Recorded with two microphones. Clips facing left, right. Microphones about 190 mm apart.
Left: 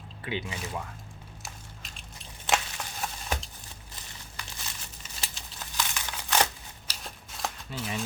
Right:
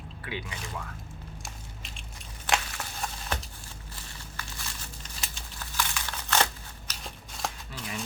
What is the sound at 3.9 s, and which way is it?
Crumpling, 20° left (ahead or behind).